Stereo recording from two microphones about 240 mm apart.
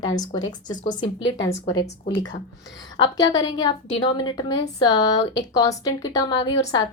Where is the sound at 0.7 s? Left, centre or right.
Centre.